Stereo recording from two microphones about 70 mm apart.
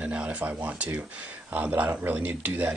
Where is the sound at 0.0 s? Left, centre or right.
Centre.